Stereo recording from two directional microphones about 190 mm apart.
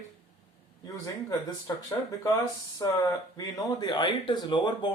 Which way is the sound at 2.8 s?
20° left (ahead or behind).